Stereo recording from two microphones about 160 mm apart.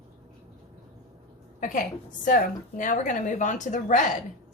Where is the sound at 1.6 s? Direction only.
50° left (ahead or behind).